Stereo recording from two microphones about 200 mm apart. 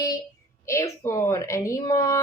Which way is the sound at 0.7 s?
15° left (ahead or behind).